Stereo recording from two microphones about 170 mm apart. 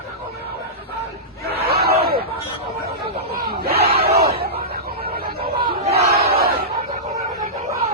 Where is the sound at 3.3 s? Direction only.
65° right (ahead or behind).